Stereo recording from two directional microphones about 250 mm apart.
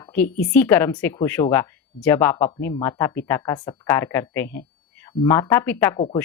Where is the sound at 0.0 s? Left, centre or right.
Centre.